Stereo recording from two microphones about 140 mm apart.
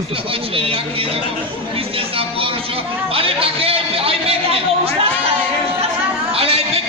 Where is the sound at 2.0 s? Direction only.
40° right (ahead or behind).